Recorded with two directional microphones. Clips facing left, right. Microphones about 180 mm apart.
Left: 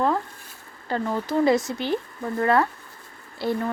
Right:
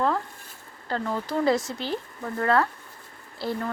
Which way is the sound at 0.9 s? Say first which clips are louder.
Left 3 dB; 10° left (ahead or behind).